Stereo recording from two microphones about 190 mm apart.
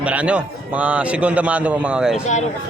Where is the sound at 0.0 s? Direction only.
5° right (ahead or behind).